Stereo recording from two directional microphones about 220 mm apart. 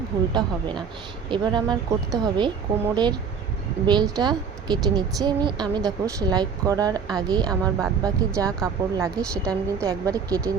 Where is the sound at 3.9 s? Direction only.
20° right (ahead or behind).